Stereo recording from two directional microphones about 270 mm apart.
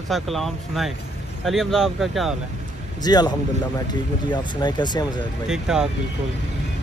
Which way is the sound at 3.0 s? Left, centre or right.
Centre.